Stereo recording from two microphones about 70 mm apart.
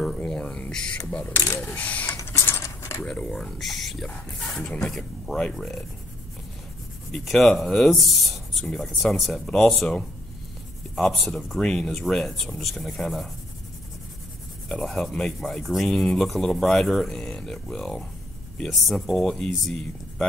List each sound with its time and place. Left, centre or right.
0.3 s speech: centre
1.8 s a sound: left
2.0 s printer: left
2.6 s mechanisms: left
3.1 s speech: centre
7.1 s speech: centre
14.7 s speech: centre